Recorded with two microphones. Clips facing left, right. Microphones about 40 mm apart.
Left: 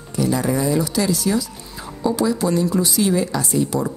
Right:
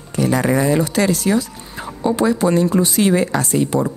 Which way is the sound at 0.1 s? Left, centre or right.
Right.